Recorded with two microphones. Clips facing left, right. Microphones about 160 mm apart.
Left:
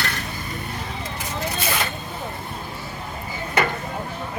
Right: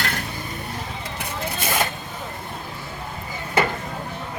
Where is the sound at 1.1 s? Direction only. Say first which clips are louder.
Left 1 dB; 50° right (ahead or behind).